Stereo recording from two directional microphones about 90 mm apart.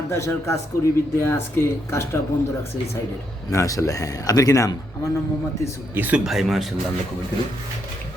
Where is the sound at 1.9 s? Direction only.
30° left (ahead or behind).